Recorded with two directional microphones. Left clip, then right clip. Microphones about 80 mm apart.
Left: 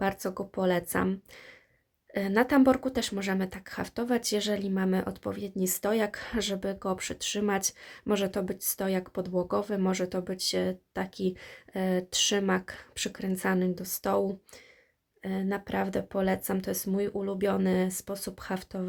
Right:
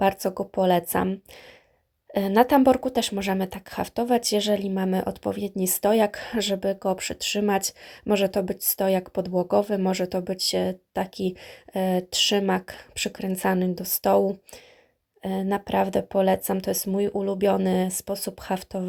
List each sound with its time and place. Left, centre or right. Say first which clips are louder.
0.0 s speech: right 8 dB; right
2.1 s a woman's voice: right 7 dB; right
2.6 s speech: right 5 dB; right